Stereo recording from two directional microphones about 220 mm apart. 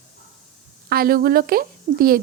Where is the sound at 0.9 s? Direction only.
40° right (ahead or behind).